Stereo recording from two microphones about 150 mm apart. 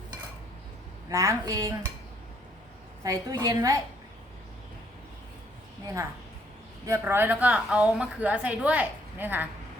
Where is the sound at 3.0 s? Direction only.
25° right (ahead or behind).